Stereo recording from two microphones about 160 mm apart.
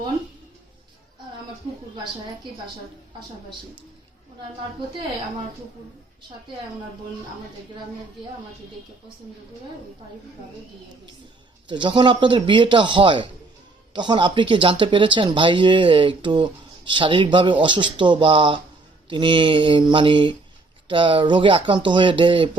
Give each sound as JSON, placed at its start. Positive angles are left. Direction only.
{"t": 11.7, "sound": "speech", "side_deg": -30}